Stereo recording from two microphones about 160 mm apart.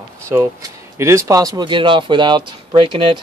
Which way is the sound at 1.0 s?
20° right (ahead or behind).